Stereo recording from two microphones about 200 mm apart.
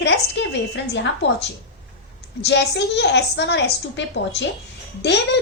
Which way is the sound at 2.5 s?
60° left (ahead or behind).